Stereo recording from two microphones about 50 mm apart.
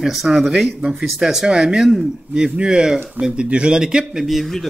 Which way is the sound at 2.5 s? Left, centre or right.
Centre.